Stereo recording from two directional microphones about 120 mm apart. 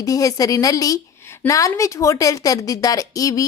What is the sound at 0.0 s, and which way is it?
A woman's voice, 30° left (ahead or behind).